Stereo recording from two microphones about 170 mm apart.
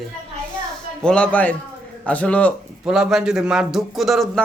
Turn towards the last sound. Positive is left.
turn(degrees=0)  # may be behind; listen again after turning